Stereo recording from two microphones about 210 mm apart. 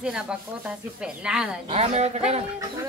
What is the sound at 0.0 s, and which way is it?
Speech, 5° right (ahead or behind).